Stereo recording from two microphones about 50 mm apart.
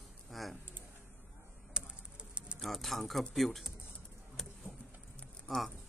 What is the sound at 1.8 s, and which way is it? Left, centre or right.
Bird, right.